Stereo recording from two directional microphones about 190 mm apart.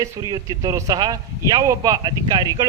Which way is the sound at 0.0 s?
15° right (ahead or behind).